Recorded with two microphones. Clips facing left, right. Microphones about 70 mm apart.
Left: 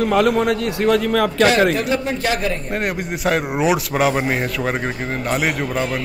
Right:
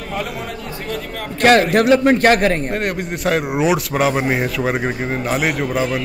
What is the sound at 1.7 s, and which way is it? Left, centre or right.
Speech, right.